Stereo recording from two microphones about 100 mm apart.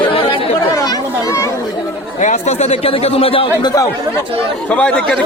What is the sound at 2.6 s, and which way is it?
Speech, 80° left.